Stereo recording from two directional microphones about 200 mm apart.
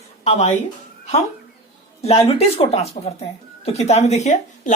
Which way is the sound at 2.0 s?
30° left (ahead or behind).